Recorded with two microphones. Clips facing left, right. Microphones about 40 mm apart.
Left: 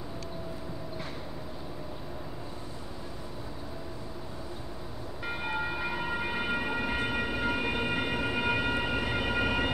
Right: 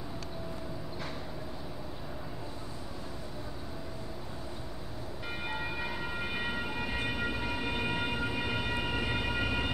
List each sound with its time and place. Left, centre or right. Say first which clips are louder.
6.3 s train: left 4 dB; left
7.6 s train: left 3 dB; centre